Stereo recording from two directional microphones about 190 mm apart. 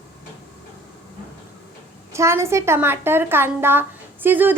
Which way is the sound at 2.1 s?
15° right (ahead or behind).